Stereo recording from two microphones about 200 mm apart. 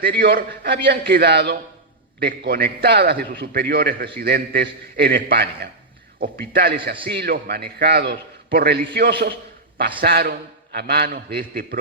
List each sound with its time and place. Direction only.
0.0 s a man's voice: 50° right (ahead or behind)